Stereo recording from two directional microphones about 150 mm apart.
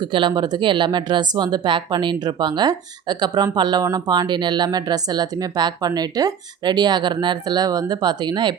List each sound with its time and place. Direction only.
0.0 s speech: 30° right (ahead or behind)